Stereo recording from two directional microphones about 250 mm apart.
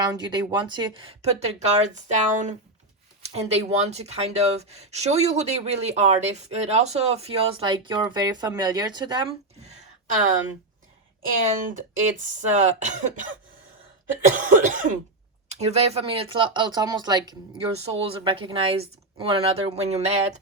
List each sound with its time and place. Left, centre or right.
0.0 s speech: centre
12.2 s speech: right
14.3 s cough: right
15.4 s speech: right